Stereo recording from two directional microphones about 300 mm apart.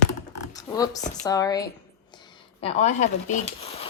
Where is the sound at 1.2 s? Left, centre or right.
Centre.